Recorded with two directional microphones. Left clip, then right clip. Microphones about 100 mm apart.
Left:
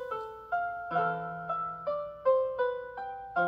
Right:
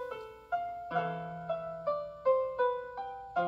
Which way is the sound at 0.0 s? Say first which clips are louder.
Left 4 dB; 40° left (ahead or behind).